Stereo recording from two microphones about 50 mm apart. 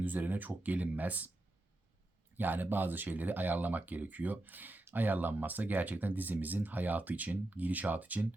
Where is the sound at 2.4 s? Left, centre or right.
Right.